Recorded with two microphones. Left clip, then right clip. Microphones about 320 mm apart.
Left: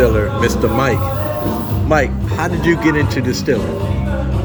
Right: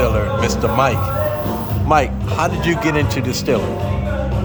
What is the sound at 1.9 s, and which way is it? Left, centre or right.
Speech, centre.